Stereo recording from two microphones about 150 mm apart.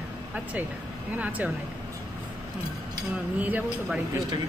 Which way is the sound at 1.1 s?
10° right (ahead or behind).